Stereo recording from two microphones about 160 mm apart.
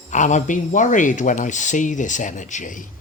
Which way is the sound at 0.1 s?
50° left (ahead or behind).